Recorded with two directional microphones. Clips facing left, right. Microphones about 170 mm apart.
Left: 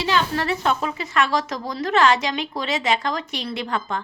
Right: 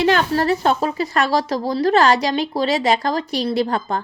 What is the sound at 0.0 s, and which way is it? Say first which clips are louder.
A woman's voice: right 5 dB; 50° right (ahead or behind).